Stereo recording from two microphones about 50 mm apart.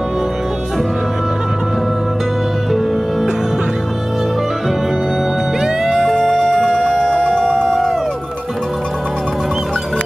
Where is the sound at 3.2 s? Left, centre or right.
Centre.